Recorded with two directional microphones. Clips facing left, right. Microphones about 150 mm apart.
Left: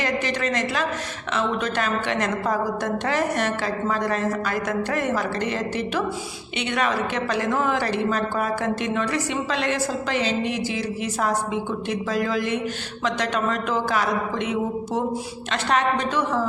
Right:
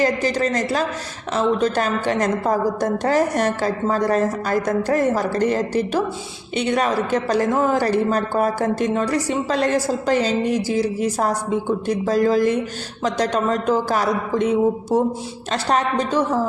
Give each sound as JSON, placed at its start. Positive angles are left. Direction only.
{"t": 0.0, "sound": "a woman's voice", "side_deg": -35}